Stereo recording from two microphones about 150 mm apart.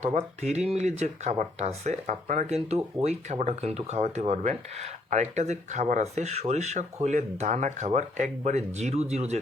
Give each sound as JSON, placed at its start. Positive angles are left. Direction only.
{"t": 0.0, "sound": "speech", "side_deg": -45}